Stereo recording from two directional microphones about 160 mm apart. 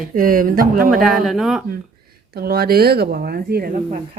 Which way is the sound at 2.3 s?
70° right (ahead or behind).